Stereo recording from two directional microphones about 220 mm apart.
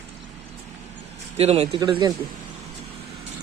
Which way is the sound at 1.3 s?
25° right (ahead or behind).